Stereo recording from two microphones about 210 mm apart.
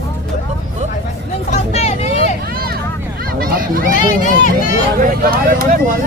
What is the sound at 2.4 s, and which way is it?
Vehicle, 45° right (ahead or behind).